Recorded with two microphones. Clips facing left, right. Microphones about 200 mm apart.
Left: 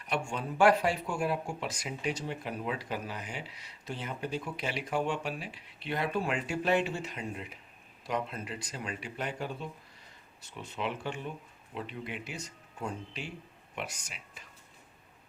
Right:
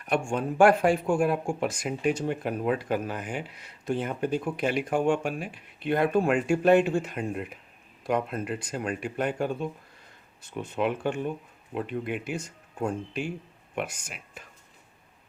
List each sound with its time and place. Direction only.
0.0 s speech: 50° right (ahead or behind)